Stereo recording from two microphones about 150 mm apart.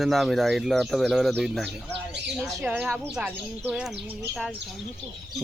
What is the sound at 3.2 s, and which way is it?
Speech, 10° right (ahead or behind).